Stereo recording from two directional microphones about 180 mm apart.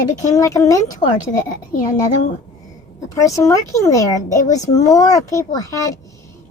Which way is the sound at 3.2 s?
15° left (ahead or behind).